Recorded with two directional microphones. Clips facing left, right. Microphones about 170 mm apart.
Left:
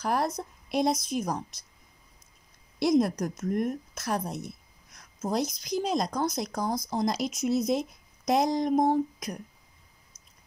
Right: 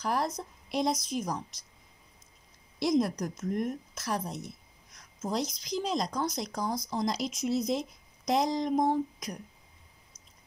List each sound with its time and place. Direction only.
0.0 s speech: 55° left (ahead or behind)
2.8 s a woman's voice: 60° left (ahead or behind)